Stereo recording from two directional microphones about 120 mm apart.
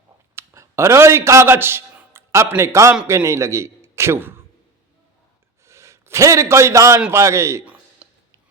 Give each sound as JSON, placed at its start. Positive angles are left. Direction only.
{"t": 0.3, "sound": "a man's voice", "side_deg": -25}
{"t": 5.6, "sound": "a man's voice", "side_deg": -25}
{"t": 7.6, "sound": "a sound", "side_deg": -10}